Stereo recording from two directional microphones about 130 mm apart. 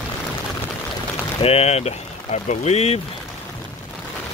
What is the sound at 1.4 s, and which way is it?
Speech, 50° left (ahead or behind).